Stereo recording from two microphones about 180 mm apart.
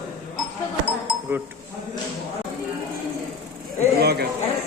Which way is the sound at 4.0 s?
65° right (ahead or behind).